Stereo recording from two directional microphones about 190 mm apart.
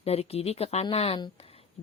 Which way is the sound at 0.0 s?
30° left (ahead or behind).